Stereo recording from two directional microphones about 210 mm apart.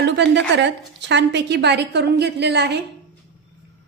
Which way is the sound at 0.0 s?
55° right (ahead or behind).